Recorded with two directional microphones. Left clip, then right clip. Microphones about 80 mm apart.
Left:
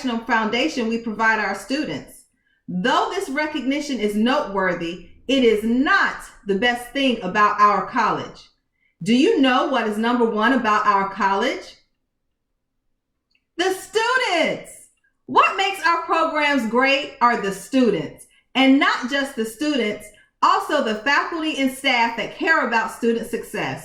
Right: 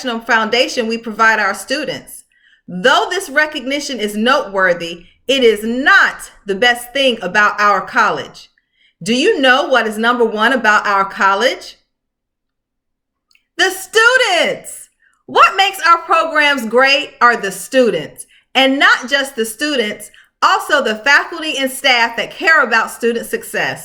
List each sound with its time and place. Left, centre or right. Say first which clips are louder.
0.0 s a woman's voice: right 6 dB; right
13.6 s a woman's voice: right 9 dB; right